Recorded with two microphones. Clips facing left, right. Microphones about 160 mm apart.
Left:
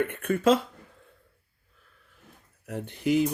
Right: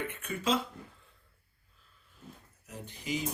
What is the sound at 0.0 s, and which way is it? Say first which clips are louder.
Speech: left 11 dB; 55° left (ahead or behind).